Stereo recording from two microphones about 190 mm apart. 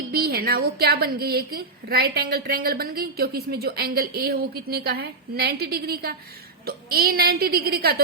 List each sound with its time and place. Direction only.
0.1 s a woman's voice: 55° right (ahead or behind)